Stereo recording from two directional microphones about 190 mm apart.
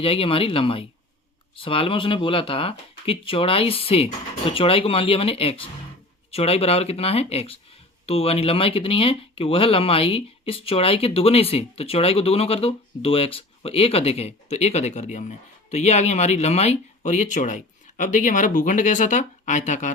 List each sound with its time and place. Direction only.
0.0 s speech: 30° left (ahead or behind)